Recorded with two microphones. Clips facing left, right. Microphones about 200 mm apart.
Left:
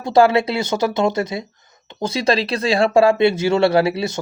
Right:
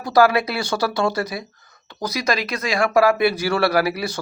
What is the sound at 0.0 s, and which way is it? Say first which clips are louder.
Speech: left 2 dB; 25° left (ahead or behind).